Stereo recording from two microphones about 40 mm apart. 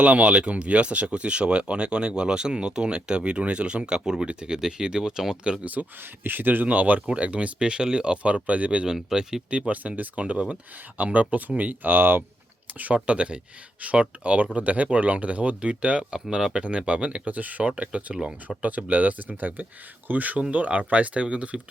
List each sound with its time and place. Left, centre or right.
0.0 s speech: right
6.0 s speech: right
7.1 s speech: right
8.9 s speech: centre
9.5 s speech: right
10.9 s speech: right
12.8 s speech: right
16.3 s speech: centre
16.6 s speech: right
17.2 s speech: right
18.1 s speech: centre
18.4 s speech: right